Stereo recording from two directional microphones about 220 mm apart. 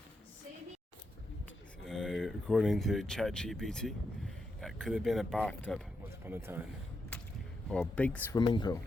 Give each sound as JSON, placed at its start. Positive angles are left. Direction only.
{"t": 1.8, "sound": "speech", "side_deg": 0}
{"t": 6.2, "sound": "speech", "side_deg": -10}
{"t": 7.7, "sound": "speech", "side_deg": 5}
{"t": 8.4, "sound": "speech", "side_deg": 20}